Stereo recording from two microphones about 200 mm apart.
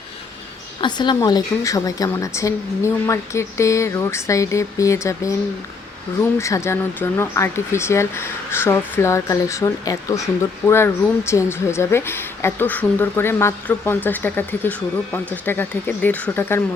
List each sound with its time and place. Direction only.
0.8 s speech: 20° left (ahead or behind)
6.4 s speech: 15° left (ahead or behind)